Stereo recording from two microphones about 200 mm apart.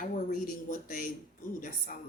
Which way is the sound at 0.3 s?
45° left (ahead or behind).